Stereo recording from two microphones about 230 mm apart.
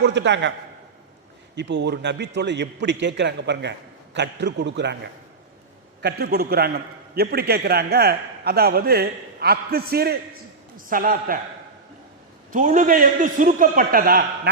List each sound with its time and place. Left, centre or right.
0.0 s a man's voice: right
1.5 s a man's voice: right
6.0 s a man's voice: right
12.5 s a man's voice: right